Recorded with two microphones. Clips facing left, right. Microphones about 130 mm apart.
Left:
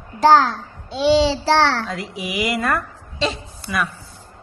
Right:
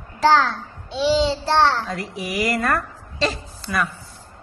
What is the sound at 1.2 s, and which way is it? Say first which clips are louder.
Speech: left 1 dB; 90° left.